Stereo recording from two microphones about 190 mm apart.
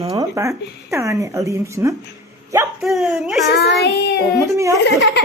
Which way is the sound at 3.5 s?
60° left (ahead or behind).